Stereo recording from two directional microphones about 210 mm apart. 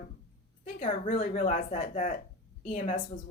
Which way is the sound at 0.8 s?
35° left (ahead or behind).